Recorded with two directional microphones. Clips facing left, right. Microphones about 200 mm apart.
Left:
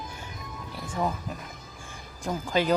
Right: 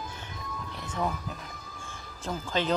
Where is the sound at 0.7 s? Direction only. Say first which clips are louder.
Left 3 dB; 10° left (ahead or behind).